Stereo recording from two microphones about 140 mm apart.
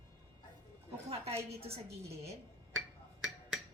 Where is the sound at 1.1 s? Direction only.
45° right (ahead or behind).